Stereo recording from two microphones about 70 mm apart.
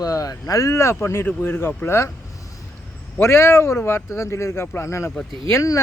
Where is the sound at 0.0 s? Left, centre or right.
Left.